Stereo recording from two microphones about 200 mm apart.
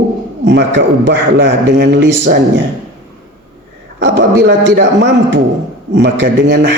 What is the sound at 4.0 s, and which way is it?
Speech, 65° right (ahead or behind).